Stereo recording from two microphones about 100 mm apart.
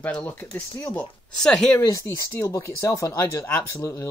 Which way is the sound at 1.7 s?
30° left (ahead or behind).